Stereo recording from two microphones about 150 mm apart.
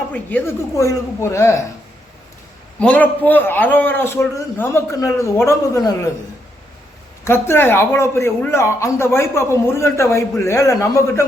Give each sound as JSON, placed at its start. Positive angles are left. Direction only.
{"t": 0.1, "sound": "speech", "side_deg": 10}
{"t": 2.7, "sound": "speech", "side_deg": 10}
{"t": 7.3, "sound": "speech", "side_deg": 15}